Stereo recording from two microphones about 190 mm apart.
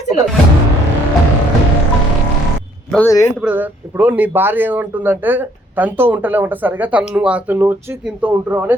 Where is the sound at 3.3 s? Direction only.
10° right (ahead or behind).